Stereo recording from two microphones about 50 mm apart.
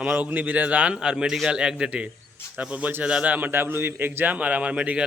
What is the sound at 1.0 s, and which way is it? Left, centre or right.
Speech, centre.